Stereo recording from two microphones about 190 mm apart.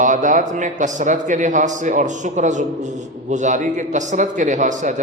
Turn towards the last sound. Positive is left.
turn(degrees=-40)  # may be behind; listen again after turning